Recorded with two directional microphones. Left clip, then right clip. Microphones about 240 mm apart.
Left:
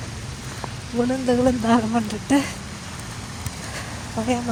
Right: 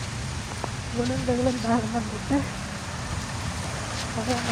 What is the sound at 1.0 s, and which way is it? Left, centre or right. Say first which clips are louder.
Speech: left 6 dB; left.